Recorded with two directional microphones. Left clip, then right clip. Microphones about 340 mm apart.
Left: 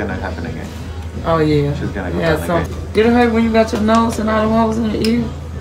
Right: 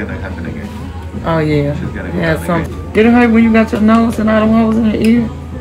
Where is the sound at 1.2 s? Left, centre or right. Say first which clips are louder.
Even; centre.